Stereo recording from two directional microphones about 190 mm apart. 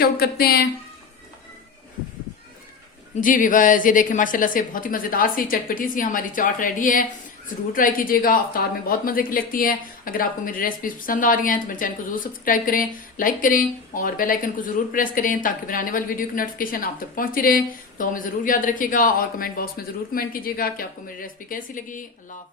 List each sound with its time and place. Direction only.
0.0 s a woman's voice: 50° left (ahead or behind)
3.2 s a woman's voice: 45° left (ahead or behind)